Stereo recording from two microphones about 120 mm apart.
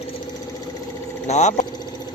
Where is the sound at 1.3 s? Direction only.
75° left (ahead or behind).